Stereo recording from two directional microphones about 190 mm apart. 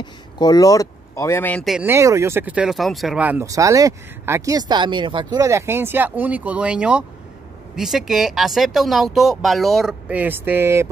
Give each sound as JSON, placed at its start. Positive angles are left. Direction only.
{"t": 0.0, "sound": "speech", "side_deg": 20}
{"t": 1.9, "sound": "speech", "side_deg": -15}